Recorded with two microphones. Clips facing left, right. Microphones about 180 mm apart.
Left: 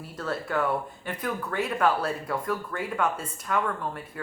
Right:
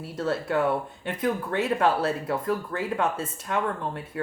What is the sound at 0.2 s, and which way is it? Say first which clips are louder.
Speech: right 3 dB; 25° right (ahead or behind).